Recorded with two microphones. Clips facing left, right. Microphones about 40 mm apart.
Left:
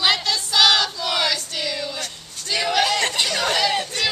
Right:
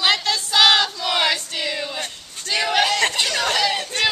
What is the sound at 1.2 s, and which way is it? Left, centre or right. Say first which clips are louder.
Music: right 2 dB; centre.